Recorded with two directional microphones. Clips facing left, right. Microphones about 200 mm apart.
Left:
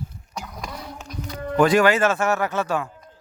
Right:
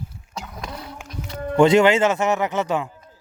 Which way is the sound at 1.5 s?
25° right (ahead or behind).